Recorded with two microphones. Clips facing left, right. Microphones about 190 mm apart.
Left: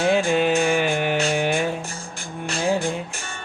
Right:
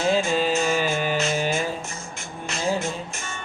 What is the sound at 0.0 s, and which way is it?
Music, 60° left (ahead or behind).